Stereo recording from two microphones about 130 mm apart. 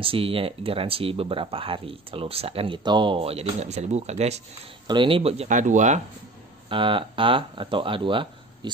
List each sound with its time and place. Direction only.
0.0 s speech: 45° right (ahead or behind)
4.8 s speech: 40° right (ahead or behind)
5.5 s speech: 75° right (ahead or behind)
6.7 s speech: 40° right (ahead or behind)